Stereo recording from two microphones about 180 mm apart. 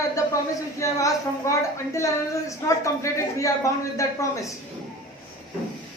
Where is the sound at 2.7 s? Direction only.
15° left (ahead or behind).